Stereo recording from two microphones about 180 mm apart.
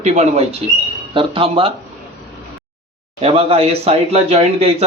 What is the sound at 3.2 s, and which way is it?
Speech, 35° right (ahead or behind).